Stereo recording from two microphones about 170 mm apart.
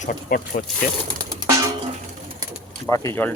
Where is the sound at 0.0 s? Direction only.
55° left (ahead or behind).